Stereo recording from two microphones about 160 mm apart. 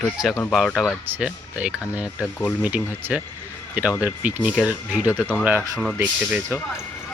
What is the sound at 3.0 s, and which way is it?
Speech, 10° right (ahead or behind).